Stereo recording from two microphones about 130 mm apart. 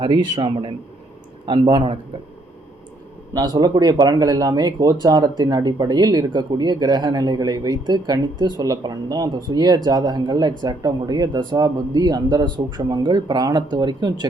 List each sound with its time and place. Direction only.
0.0 s speech: 40° right (ahead or behind)
3.3 s speech: 30° right (ahead or behind)